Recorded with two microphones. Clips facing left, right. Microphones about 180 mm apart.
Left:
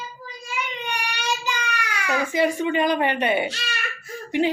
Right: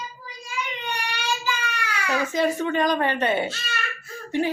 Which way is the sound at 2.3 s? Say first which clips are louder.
Left 2 dB; 15° left (ahead or behind).